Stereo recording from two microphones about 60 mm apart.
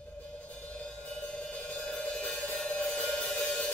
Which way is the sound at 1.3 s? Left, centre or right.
Centre.